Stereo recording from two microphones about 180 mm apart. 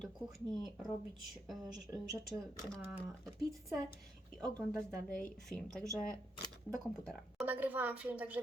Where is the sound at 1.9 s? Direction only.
20° right (ahead or behind).